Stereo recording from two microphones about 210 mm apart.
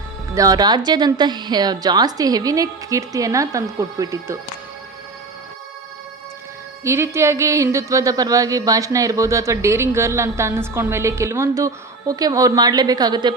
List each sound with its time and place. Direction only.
0.3 s a woman's voice: 15° right (ahead or behind)
6.8 s speech: 10° right (ahead or behind)